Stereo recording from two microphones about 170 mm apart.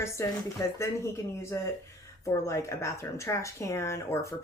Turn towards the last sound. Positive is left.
turn(degrees=15)  # may be behind; listen again after turning